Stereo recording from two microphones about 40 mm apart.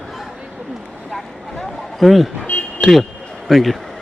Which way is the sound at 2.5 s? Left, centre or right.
Left.